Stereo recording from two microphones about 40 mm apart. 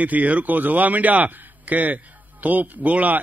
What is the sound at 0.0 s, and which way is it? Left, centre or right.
Speech, right.